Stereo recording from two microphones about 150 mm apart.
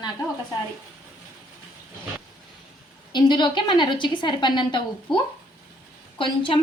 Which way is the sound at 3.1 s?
30° left (ahead or behind).